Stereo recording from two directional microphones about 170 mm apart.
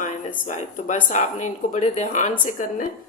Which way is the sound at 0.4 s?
45° left (ahead or behind).